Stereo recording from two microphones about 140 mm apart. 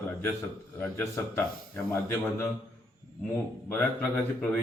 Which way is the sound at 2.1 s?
15° left (ahead or behind).